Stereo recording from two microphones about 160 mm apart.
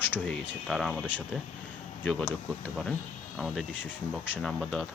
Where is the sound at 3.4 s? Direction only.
5° right (ahead or behind).